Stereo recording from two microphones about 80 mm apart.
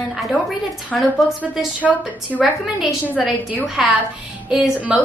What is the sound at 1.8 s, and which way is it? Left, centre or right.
Speech, centre.